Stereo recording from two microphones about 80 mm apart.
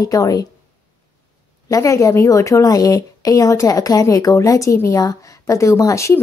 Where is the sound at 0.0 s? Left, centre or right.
Left.